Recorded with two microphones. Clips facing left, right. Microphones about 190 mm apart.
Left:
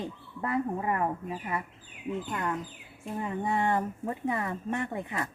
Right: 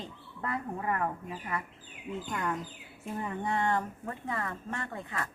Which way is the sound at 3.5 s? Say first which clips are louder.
Left 2 dB; 10° left (ahead or behind).